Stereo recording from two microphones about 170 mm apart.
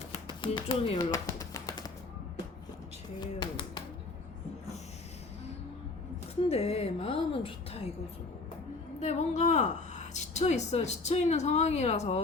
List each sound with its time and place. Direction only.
0.3 s speech: 25° left (ahead or behind)
0.9 s a sound: 20° left (ahead or behind)
3.2 s speech: 25° left (ahead or behind)
6.5 s a woman's voice: 40° left (ahead or behind)
9.0 s a woman's voice: 40° left (ahead or behind)